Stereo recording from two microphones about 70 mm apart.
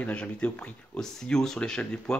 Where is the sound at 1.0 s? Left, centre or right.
Centre.